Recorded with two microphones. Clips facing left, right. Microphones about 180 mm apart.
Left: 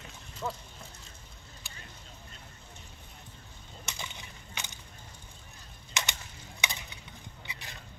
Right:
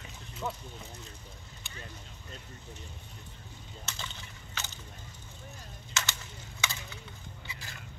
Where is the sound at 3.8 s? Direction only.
10° left (ahead or behind).